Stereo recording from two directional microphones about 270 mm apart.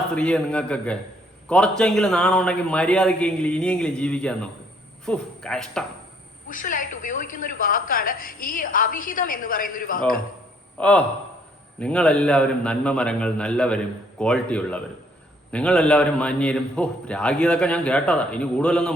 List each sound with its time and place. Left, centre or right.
0.1 s a man's voice: centre
6.5 s a woman's voice: left
10.8 s a man's voice: centre